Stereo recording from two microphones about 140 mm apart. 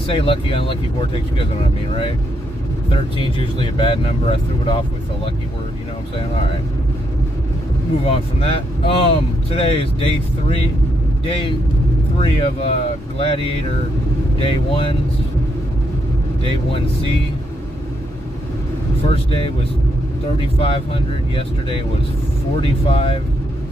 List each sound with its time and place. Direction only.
0.0 s speech: 40° left (ahead or behind)
2.9 s speech: 35° left (ahead or behind)
8.0 s speech: 45° left (ahead or behind)
16.4 s speech: 40° left (ahead or behind)
19.1 s speech: 45° left (ahead or behind)